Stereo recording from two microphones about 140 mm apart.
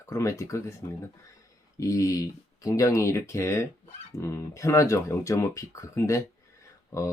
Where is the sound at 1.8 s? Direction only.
25° left (ahead or behind).